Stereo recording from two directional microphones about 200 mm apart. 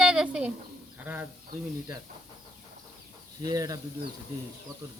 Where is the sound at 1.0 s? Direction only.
10° right (ahead or behind).